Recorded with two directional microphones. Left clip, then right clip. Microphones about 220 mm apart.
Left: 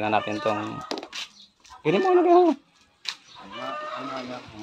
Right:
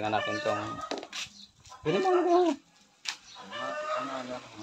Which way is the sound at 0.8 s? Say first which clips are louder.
Left 3 dB; 50° left (ahead or behind).